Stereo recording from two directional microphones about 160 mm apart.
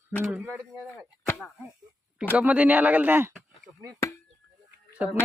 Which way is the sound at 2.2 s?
5° right (ahead or behind).